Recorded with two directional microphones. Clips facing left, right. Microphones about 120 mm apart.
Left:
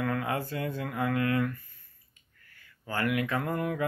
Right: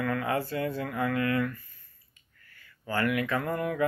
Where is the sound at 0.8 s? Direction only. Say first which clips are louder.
Right 1 dB; 15° left (ahead or behind).